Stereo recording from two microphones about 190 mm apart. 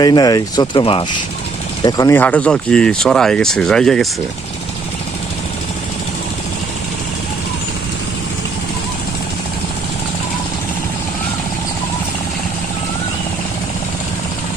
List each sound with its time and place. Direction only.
0.0 s speech: 20° left (ahead or behind); by 4.1 s 5° left (ahead or behind)